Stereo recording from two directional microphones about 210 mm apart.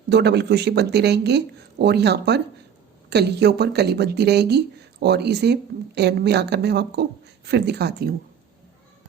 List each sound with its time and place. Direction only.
0.1 s speech: 50° right (ahead or behind)